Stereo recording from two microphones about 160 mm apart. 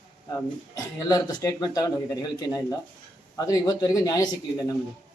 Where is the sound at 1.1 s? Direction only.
25° left (ahead or behind).